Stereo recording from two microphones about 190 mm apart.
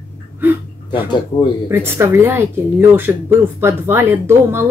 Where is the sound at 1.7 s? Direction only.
10° right (ahead or behind).